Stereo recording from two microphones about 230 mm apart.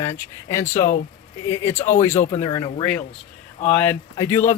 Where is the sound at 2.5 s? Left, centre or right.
Left.